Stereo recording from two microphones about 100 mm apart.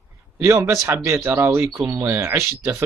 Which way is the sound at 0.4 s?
30° right (ahead or behind).